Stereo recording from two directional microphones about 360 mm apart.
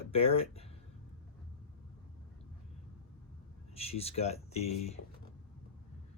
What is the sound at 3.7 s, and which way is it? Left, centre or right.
Speech, centre.